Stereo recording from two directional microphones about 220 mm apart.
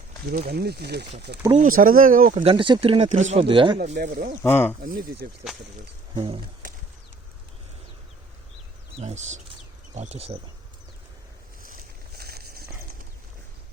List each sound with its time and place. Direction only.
0.3 s speech: 45° right (ahead or behind)
1.5 s speech: 35° right (ahead or behind)
2.4 s speech: 25° right (ahead or behind)
3.8 s speech: 35° right (ahead or behind)
4.4 s speech: 10° left (ahead or behind)
4.8 s speech: 40° right (ahead or behind)
6.1 s speech: 25° right (ahead or behind)
9.0 s speech: 30° right (ahead or behind)
11.6 s a sound: 40° right (ahead or behind)